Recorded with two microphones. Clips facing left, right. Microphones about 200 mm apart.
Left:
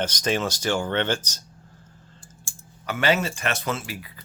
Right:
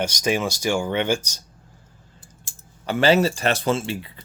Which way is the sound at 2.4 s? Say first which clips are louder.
Right 4 dB; 30° right (ahead or behind).